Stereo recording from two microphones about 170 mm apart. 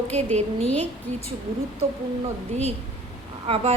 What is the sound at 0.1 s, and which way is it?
Speech, 40° right (ahead or behind).